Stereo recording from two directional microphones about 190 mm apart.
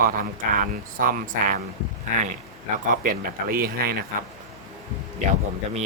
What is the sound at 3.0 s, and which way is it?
Speech, 50° right (ahead or behind).